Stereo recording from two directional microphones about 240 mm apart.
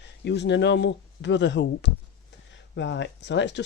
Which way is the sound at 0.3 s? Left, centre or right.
Left.